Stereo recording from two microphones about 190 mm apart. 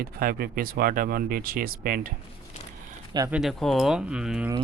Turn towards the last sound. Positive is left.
turn(degrees=-5)  # may be behind; listen again after turning